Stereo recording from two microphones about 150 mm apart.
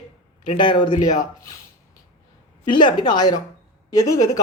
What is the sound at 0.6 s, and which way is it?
Speech, 30° left (ahead or behind).